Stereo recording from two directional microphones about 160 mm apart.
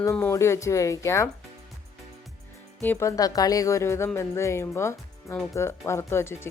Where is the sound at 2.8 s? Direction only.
15° left (ahead or behind).